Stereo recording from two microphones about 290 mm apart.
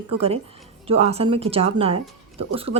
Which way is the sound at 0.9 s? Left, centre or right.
Right.